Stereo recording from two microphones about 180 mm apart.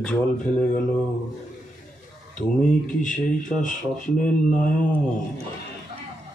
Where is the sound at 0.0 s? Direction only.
5° left (ahead or behind).